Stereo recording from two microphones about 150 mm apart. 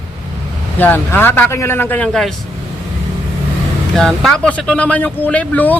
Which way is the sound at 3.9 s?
5° left (ahead or behind).